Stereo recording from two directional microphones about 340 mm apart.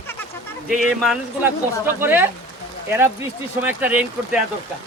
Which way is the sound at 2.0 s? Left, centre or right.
Centre.